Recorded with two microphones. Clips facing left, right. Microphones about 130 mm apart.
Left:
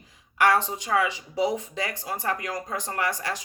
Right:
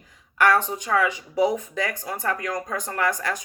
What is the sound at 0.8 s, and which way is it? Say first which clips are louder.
Speech: right 2 dB; 25° left (ahead or behind).